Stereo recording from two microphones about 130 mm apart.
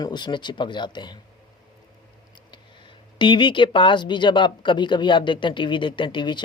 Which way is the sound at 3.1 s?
35° left (ahead or behind).